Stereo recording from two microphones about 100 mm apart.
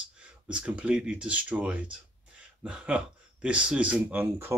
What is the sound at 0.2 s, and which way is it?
Speech, 10° right (ahead or behind).